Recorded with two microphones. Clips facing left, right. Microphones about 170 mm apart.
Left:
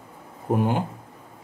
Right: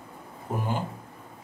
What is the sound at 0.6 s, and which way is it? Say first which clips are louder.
Speech: left 6 dB; 60° left (ahead or behind).